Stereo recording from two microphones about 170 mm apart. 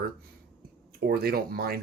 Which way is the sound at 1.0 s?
65° right (ahead or behind).